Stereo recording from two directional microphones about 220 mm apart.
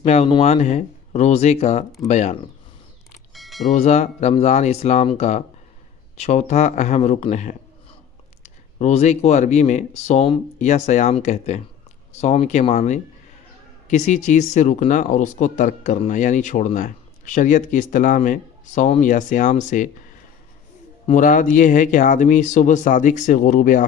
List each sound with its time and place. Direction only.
0.0 s speech: 30° left (ahead or behind)
3.3 s mechanisms: centre (ahead or behind)
3.7 s speech: 30° left (ahead or behind)
21.1 s speech: 35° left (ahead or behind)